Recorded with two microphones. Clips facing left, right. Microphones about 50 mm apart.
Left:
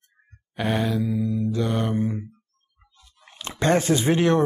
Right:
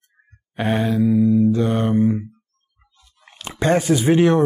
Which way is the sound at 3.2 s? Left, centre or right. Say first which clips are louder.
Right 3 dB; centre.